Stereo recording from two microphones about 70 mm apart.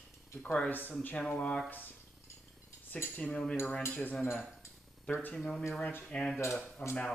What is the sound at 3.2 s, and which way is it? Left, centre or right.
Speech, centre.